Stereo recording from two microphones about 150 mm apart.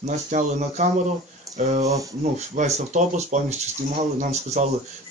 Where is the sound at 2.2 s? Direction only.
50° right (ahead or behind).